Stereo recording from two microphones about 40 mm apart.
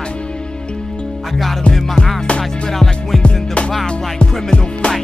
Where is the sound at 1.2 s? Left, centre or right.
Centre.